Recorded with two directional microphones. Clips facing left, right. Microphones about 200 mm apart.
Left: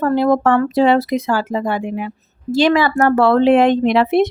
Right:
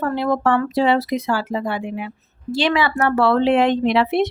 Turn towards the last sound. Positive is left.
turn(degrees=45)  # may be behind; listen again after turning